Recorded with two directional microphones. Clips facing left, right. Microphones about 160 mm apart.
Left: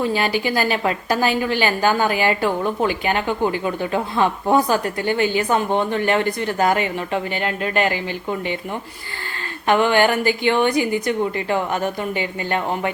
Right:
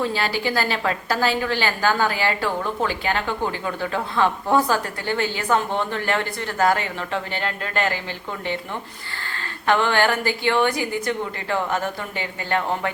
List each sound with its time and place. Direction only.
0.0 s a woman's voice: 15° left (ahead or behind)
9.6 s a woman's voice: 15° left (ahead or behind)